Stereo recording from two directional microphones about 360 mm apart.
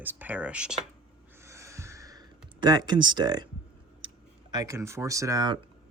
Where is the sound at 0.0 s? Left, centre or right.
Centre.